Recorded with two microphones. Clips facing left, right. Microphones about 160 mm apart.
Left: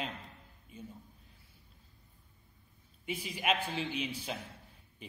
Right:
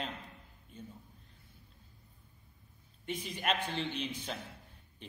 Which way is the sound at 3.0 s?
5° left (ahead or behind).